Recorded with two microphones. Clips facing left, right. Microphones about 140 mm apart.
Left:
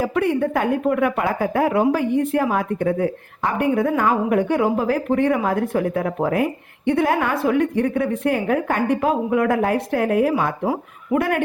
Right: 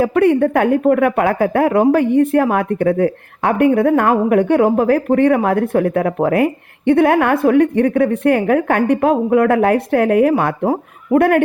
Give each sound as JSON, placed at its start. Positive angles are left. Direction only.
{"t": 0.0, "sound": "a woman's voice", "side_deg": -60}